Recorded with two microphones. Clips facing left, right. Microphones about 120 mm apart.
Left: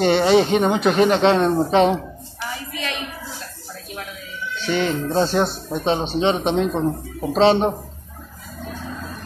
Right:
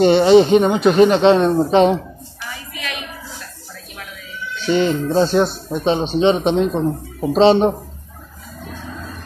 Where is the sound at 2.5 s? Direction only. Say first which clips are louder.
Left 1 dB; 30° left (ahead or behind).